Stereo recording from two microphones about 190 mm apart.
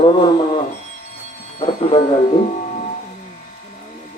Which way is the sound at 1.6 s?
30° left (ahead or behind).